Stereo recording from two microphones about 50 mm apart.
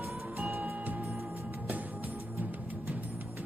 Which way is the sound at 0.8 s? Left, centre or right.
Right.